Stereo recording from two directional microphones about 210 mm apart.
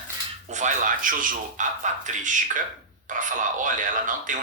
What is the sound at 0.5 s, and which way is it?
Speech, 40° right (ahead or behind).